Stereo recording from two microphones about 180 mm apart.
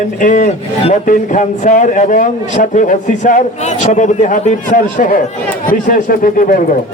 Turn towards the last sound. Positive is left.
turn(degrees=50)  # may be behind; listen again after turning